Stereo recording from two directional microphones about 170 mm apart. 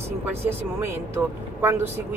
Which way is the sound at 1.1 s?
15° right (ahead or behind).